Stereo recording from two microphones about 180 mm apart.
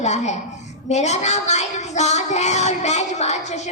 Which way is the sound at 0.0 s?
40° left (ahead or behind).